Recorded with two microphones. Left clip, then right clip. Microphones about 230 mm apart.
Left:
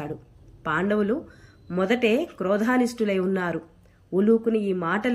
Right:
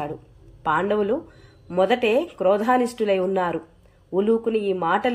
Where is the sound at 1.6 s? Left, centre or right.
Centre.